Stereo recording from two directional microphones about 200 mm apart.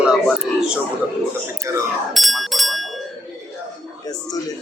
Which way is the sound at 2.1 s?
Centre (ahead or behind).